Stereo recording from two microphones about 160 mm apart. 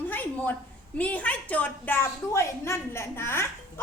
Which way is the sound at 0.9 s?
10° left (ahead or behind).